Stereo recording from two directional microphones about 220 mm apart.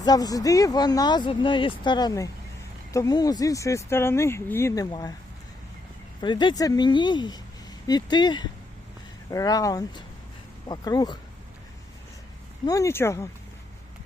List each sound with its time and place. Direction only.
0.0 s speech: 15° left (ahead or behind)
6.2 s speech: 20° left (ahead or behind)
12.6 s speech: 15° left (ahead or behind)